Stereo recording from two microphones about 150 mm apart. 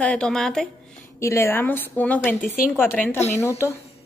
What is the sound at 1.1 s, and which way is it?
A woman's voice, 20° left (ahead or behind).